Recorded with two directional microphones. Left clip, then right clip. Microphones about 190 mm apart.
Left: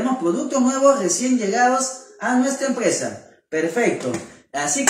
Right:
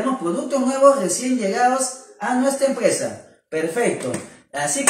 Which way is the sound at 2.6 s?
15° left (ahead or behind).